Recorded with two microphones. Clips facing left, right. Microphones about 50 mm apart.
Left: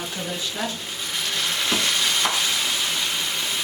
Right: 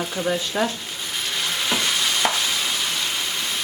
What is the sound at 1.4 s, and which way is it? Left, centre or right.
Stir, centre.